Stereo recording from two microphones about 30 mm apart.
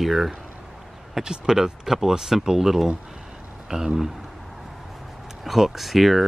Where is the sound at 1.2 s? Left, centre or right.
Right.